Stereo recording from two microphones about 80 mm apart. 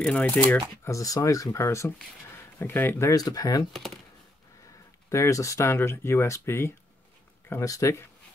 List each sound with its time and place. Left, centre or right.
0.0 s speech: centre
0.8 s speech: left
2.3 s a sound: left
3.0 s speech: left
3.7 s speech: centre
5.1 s speech: left
7.6 s speech: left